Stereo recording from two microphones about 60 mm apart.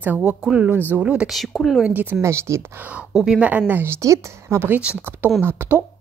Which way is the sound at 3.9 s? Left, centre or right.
Right.